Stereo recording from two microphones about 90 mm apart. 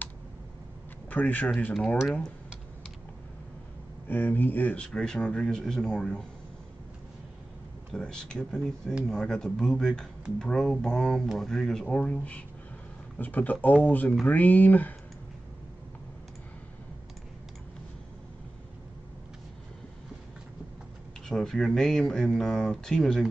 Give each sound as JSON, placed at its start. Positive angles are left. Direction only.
{"t": 1.1, "sound": "speech", "side_deg": 20}
{"t": 1.7, "sound": "speech", "side_deg": 5}
{"t": 4.1, "sound": "speech", "side_deg": 20}
{"t": 7.9, "sound": "speech", "side_deg": 10}
{"t": 21.3, "sound": "speech", "side_deg": 5}